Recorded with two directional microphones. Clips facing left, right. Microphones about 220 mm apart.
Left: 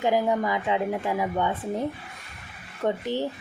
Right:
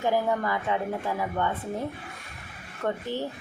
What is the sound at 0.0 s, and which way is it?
Speech, 15° left (ahead or behind).